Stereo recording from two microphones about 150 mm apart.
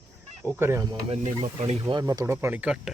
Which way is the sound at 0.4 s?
15° right (ahead or behind).